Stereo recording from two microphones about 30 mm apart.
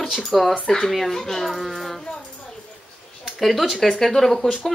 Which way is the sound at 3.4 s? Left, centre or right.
Centre.